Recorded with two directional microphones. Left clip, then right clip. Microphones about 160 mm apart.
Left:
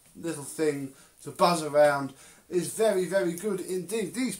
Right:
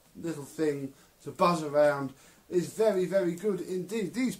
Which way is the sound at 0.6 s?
25° right (ahead or behind).